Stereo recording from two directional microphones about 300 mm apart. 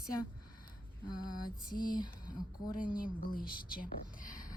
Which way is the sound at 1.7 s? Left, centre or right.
Left.